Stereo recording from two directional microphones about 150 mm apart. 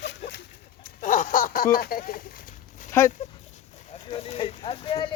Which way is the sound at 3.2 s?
50° left (ahead or behind).